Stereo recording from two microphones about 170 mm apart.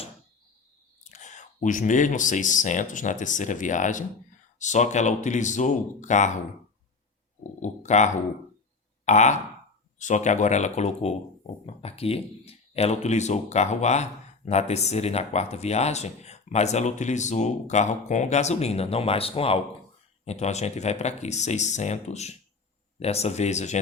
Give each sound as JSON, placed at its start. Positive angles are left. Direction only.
{"t": 1.0, "sound": "speech", "side_deg": 45}
{"t": 7.6, "sound": "speech", "side_deg": 45}